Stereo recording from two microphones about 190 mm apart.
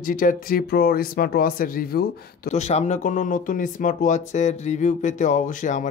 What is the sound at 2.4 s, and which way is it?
Speech, 35° left (ahead or behind).